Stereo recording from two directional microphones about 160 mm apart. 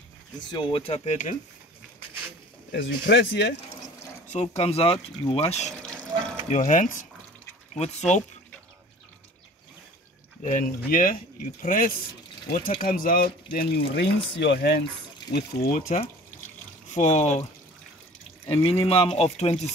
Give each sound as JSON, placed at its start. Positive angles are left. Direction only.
{"t": 0.4, "sound": "speech", "side_deg": 30}
{"t": 2.7, "sound": "speech", "side_deg": 90}
{"t": 4.3, "sound": "speech", "side_deg": 40}
{"t": 6.5, "sound": "speech", "side_deg": 50}
{"t": 10.4, "sound": "speech", "side_deg": 60}
{"t": 15.3, "sound": "speech", "side_deg": 70}
{"t": 16.9, "sound": "speech", "side_deg": 50}
{"t": 18.5, "sound": "speech", "side_deg": 35}